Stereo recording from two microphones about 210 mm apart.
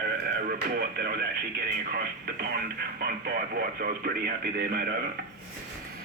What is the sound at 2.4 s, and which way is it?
Speech, 45° right (ahead or behind).